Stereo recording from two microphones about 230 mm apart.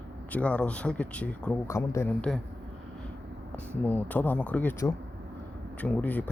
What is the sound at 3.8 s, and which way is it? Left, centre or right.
Speech, centre.